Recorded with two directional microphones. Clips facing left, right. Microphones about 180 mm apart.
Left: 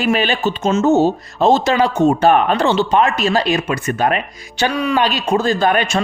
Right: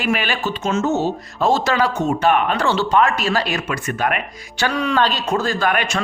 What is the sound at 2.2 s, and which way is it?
Speech, 30° left (ahead or behind).